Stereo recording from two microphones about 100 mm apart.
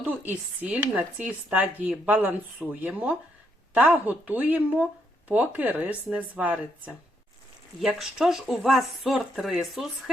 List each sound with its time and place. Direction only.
0.0 s speech: 15° right (ahead or behind)
7.9 s speech: 5° right (ahead or behind)